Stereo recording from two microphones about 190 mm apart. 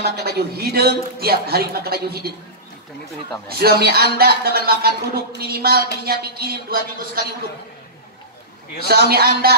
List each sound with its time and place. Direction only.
0.0 s a man's voice: 55° right (ahead or behind)
3.4 s a man's voice: 55° right (ahead or behind)
8.8 s a man's voice: 55° right (ahead or behind)